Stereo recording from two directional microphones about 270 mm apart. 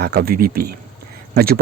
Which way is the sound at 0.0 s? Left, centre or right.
Right.